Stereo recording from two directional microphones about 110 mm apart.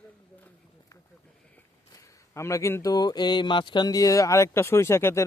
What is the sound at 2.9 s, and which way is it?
Speech, 35° left (ahead or behind).